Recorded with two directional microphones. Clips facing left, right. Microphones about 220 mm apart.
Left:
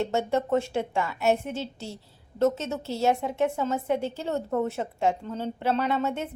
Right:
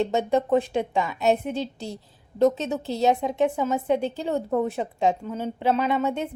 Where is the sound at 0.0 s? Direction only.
15° right (ahead or behind).